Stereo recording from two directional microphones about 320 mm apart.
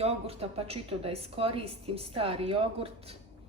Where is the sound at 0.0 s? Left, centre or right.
Centre.